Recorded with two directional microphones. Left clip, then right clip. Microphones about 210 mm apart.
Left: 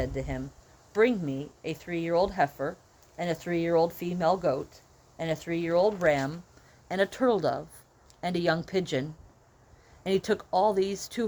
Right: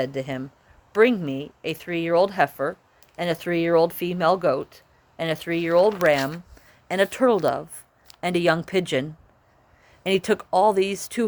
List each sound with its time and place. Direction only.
0.0 s speech: 35° right (ahead or behind)